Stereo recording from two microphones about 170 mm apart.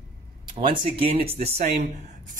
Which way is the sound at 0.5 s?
35° right (ahead or behind).